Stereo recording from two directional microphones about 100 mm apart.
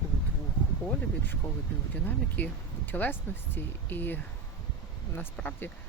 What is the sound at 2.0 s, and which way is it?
Speech, 20° left (ahead or behind).